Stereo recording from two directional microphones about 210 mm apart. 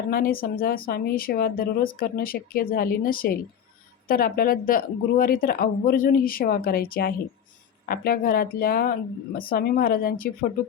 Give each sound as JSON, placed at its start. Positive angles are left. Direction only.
{"t": 0.1, "sound": "speech", "side_deg": 45}